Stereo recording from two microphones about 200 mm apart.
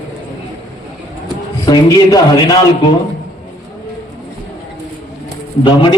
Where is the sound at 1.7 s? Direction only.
20° left (ahead or behind).